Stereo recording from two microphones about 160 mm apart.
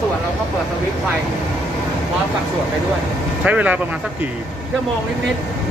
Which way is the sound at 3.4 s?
10° right (ahead or behind).